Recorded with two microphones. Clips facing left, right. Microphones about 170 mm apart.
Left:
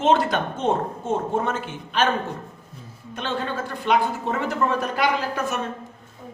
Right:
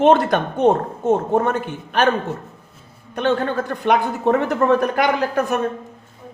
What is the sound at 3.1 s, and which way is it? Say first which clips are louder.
A woman's voice: right 8 dB; 60° right (ahead or behind).